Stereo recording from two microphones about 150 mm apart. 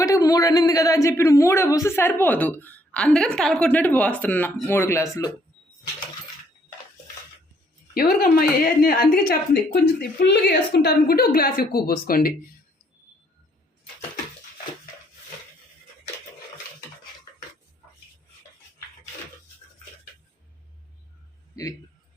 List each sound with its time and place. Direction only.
0.0 s speech: 20° left (ahead or behind)
7.9 s a woman's voice: 85° left
21.5 s a sound: 20° left (ahead or behind)